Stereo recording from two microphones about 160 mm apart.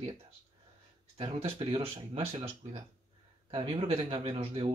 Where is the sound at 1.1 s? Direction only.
35° right (ahead or behind).